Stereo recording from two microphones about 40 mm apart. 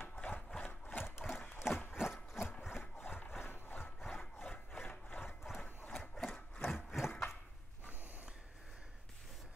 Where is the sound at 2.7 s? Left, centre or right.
Left.